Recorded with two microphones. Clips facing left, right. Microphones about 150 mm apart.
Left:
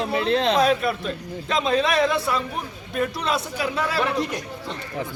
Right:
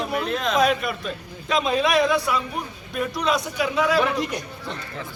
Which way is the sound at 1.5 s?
Centre (ahead or behind).